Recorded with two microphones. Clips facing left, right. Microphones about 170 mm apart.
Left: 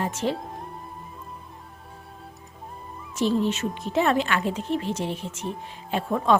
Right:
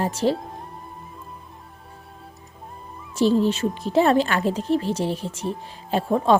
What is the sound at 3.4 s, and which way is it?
A woman's voice, 35° right (ahead or behind).